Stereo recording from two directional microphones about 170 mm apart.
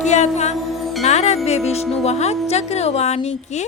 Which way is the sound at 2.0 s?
40° left (ahead or behind).